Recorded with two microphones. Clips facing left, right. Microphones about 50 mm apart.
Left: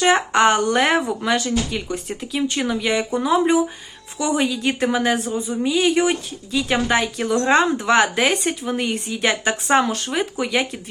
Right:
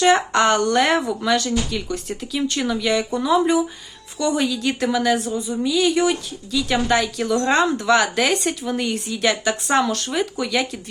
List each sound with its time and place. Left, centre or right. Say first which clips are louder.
0.0 s a woman's voice: even; centre
4.2 s a woman's voice: even; centre